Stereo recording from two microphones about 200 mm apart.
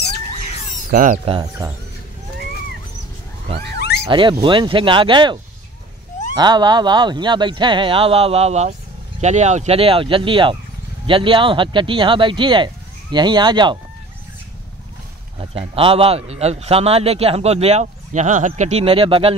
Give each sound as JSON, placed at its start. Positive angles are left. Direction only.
{"t": 0.9, "sound": "speech", "side_deg": -40}
{"t": 1.6, "sound": "a man's voice", "side_deg": -20}
{"t": 4.1, "sound": "a man's voice", "side_deg": -25}
{"t": 15.5, "sound": "a man's voice", "side_deg": -30}